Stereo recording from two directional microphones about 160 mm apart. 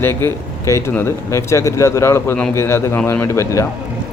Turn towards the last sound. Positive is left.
turn(degrees=15)  # may be behind; listen again after turning